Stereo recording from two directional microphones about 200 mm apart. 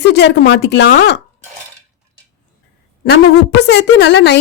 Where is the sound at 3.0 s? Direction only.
55° left (ahead or behind).